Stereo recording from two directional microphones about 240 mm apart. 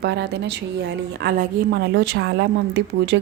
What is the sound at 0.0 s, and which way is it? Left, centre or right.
Speech, right.